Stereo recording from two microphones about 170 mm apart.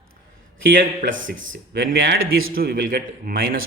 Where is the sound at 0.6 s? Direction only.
60° right (ahead or behind).